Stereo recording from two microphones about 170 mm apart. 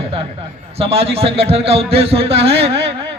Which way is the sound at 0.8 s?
35° right (ahead or behind).